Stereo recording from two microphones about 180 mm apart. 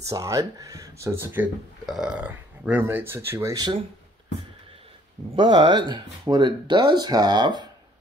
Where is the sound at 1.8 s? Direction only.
Centre (ahead or behind); by 3.8 s 20° right (ahead or behind).